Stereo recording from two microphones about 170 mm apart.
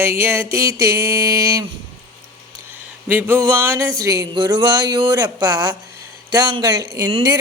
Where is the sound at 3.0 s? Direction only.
15° right (ahead or behind).